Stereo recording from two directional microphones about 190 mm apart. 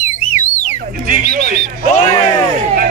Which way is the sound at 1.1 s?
50° right (ahead or behind).